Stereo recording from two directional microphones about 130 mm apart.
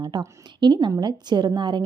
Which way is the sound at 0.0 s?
30° right (ahead or behind).